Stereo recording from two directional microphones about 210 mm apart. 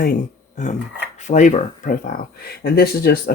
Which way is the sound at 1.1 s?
35° left (ahead or behind).